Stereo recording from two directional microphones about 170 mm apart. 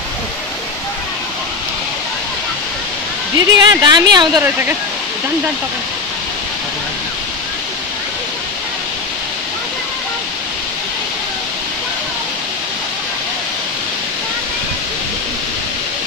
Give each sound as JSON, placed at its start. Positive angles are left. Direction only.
{"t": 3.3, "sound": "a woman's voice", "side_deg": -25}